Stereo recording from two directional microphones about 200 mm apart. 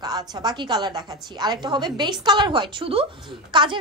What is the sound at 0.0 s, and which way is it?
A woman's voice, 20° right (ahead or behind).